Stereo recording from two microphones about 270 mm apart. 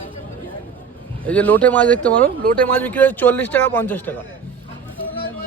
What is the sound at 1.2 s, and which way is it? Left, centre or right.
Speech, centre.